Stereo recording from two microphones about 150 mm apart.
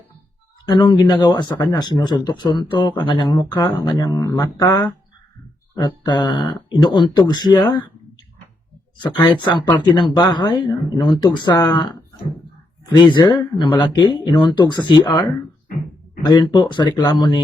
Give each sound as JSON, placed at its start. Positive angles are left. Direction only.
{"t": 0.7, "sound": "speech", "side_deg": 30}
{"t": 9.2, "sound": "speech", "side_deg": 30}